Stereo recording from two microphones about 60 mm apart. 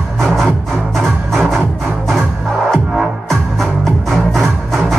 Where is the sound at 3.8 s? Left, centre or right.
Centre.